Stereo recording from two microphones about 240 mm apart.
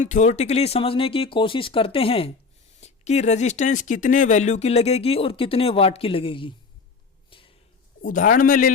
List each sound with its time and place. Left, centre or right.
0.0 s speech: left
7.3 s a sound: left
8.0 s a man's voice: left